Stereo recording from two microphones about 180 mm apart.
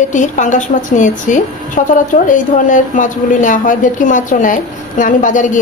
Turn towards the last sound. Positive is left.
turn(degrees=45)  # may be behind; listen again after turning